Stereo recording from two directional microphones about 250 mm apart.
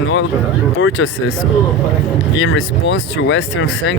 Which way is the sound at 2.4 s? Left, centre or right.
Left.